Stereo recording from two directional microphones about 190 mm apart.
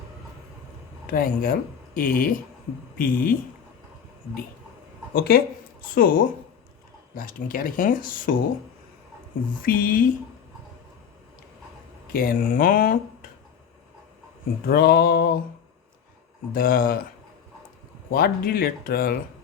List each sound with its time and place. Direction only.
1.0 s speech: 50° left (ahead or behind)
5.1 s speech: 55° left (ahead or behind)
9.6 s speech: 45° left (ahead or behind)
12.1 s speech: 50° left (ahead or behind)
14.7 s speech: 55° left (ahead or behind)
16.5 s speech: 50° left (ahead or behind)
18.1 s speech: 50° left (ahead or behind)